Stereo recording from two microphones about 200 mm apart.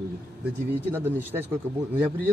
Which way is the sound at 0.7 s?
10° right (ahead or behind).